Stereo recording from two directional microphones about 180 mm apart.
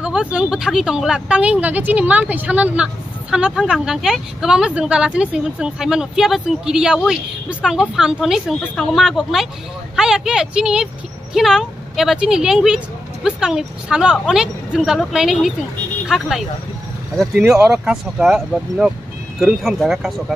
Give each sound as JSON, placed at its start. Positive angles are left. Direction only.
{"t": 0.0, "sound": "speech", "side_deg": -5}